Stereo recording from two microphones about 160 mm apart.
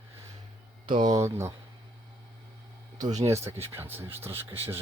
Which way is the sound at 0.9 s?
30° right (ahead or behind).